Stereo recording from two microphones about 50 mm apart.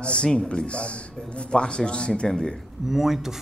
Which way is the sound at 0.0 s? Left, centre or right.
Left.